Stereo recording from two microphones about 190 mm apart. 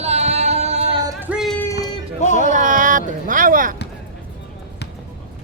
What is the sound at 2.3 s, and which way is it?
Speech, 40° right (ahead or behind).